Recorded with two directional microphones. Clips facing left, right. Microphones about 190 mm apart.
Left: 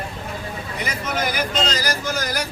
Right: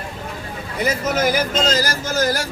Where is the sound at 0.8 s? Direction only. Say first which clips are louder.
Right 7 dB; 40° right (ahead or behind).